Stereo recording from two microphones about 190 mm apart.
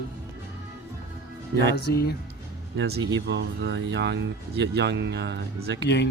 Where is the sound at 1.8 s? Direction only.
55° left (ahead or behind).